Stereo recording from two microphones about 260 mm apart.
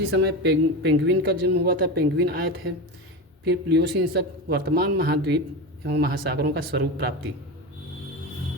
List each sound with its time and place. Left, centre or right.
0.1 s speech: right